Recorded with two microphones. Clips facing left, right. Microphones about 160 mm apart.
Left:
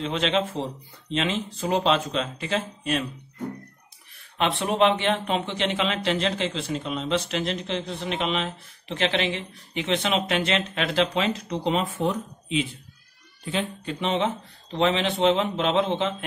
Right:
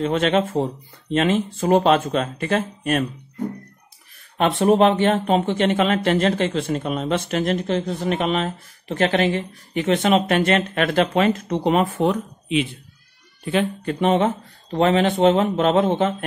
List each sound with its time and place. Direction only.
0.0 s speech: 50° right (ahead or behind)
4.4 s speech: 45° right (ahead or behind)